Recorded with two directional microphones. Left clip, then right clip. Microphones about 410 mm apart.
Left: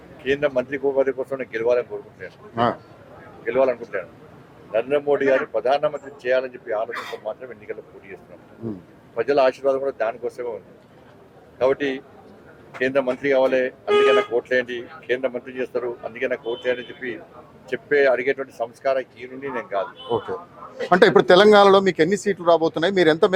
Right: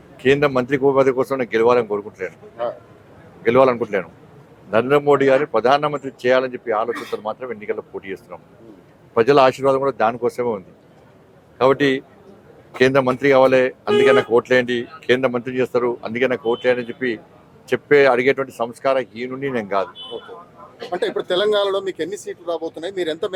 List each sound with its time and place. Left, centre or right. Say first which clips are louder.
0.3 s speech: right 5 dB; right
3.4 s speech: right 6 dB; right
11.5 s speech: right 5 dB; right
21.4 s speech: left 6 dB; left